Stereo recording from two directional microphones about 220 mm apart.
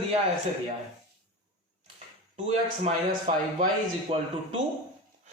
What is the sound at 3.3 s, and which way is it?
Speech, 30° right (ahead or behind).